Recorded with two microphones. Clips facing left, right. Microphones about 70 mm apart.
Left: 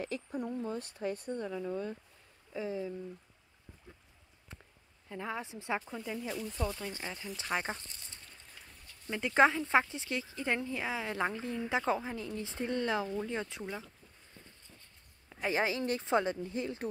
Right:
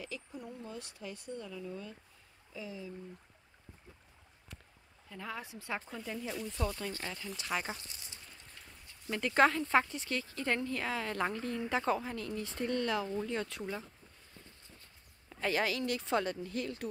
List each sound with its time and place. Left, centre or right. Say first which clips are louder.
0.0 s speech: left 7 dB; left
5.1 s speech: left 4 dB; left
5.9 s speech: left 2 dB; centre
6.9 s speech: even; centre
7.5 s speech: left 2 dB; left
9.1 s speech: left 1 dB; centre
15.2 s speech: left 1 dB; centre